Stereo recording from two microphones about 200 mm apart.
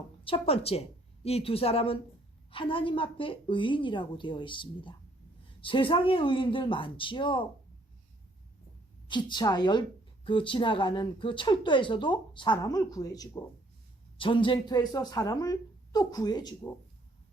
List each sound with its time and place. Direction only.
0.3 s speech: 30° left (ahead or behind)
9.0 s speech: 20° left (ahead or behind)